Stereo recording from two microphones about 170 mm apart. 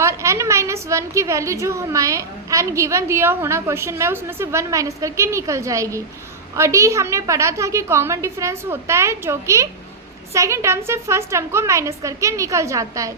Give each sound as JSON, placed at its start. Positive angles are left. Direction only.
{"t": 0.0, "sound": "a woman's voice", "side_deg": -15}